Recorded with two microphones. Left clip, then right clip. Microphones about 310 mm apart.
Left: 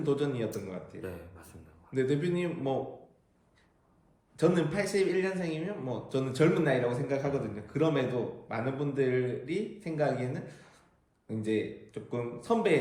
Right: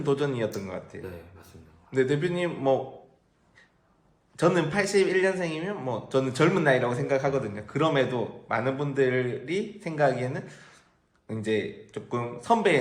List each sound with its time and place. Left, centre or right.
0.0 s a man's voice: right
4.4 s a man's voice: right